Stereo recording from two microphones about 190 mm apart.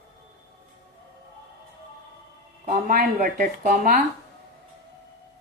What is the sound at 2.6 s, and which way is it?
Speech, 45° right (ahead or behind).